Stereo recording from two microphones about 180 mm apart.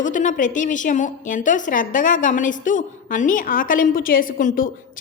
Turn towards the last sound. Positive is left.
turn(degrees=50)  # may be behind; listen again after turning